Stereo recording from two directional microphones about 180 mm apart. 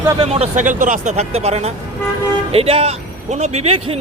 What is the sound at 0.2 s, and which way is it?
Speech, 35° right (ahead or behind).